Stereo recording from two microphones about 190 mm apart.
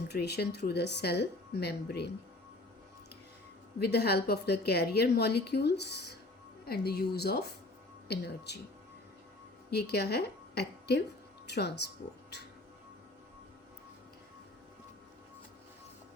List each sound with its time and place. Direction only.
0.1 s a woman's voice: 60° left (ahead or behind)
3.8 s a woman's voice: 60° left (ahead or behind)
9.6 s a woman's voice: 55° left (ahead or behind)